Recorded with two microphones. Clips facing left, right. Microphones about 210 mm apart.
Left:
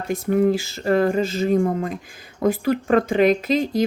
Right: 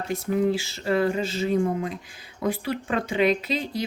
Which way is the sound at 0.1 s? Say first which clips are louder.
Left 5 dB; 50° left (ahead or behind).